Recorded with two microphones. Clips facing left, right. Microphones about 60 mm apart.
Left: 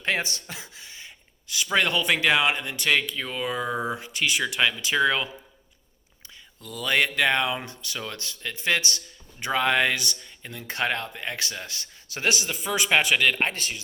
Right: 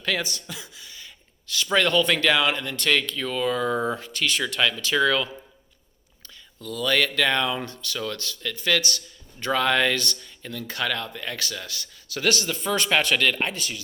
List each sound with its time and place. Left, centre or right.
0.0 s speech: left; by 13.4 s centre
13.4 s speech: left